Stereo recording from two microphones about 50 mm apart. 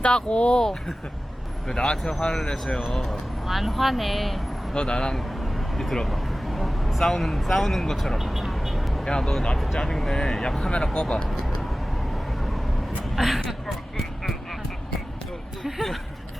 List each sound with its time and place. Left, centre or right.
0.0 s speech: left
3.4 s speech: centre
4.7 s speech: centre
5.1 s vehicle: centre
9.0 s speech: centre
12.1 s vehicle: centre
13.1 s a woman's voice: centre
15.6 s a sound: centre